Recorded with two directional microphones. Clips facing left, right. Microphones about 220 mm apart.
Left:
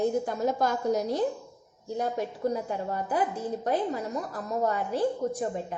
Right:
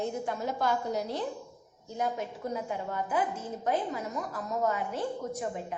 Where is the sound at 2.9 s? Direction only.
35° left (ahead or behind).